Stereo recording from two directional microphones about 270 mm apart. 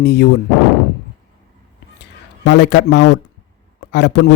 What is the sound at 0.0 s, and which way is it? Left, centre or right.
Speech, left.